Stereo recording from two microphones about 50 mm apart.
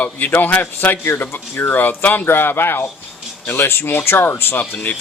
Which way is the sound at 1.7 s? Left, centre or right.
Left.